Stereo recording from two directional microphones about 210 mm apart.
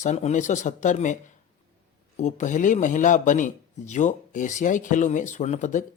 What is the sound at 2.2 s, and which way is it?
Speech, 35° left (ahead or behind).